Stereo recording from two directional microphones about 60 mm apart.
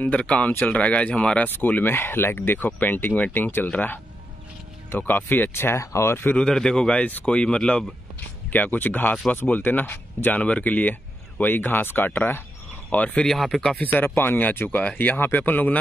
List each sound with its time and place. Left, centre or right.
0.0 s speech: left
1.5 s speech: left
5.5 s speech: left
6.3 s speech: centre
7.0 s speech: left
7.2 s speech: centre
8.5 s speech: left
12.9 s speech: left
13.3 s speech: centre
13.7 s speech: left
14.7 s speech: left